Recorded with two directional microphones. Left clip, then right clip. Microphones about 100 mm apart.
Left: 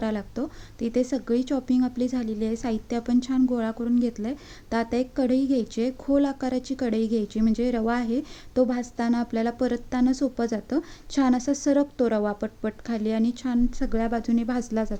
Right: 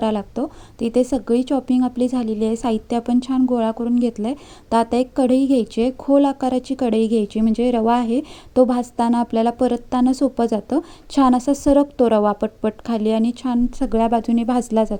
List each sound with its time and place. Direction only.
0.0 s a woman's voice: 25° right (ahead or behind)